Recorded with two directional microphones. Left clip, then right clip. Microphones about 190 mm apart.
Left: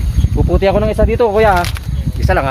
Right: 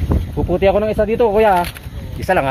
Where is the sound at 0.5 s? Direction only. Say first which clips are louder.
Left 1 dB; 20° right (ahead or behind).